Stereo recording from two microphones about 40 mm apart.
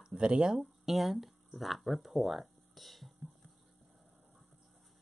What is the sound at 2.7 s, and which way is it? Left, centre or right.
Music, centre.